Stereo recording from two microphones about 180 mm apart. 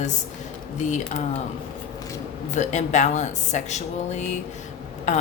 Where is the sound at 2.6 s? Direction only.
40° left (ahead or behind).